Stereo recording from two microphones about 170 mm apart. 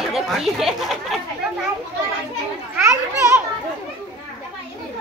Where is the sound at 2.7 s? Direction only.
15° right (ahead or behind).